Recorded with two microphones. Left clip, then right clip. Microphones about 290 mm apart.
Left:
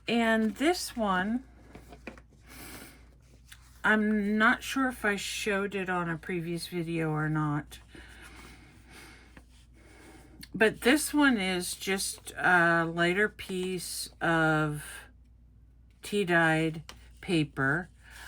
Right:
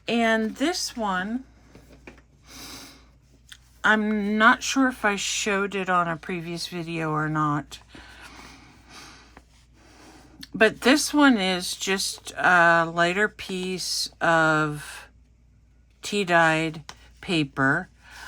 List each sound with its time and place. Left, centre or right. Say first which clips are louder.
0.0 s speech: right 5 dB; centre
3.5 s speech: right 5 dB; centre
10.6 s speech: right 6 dB; centre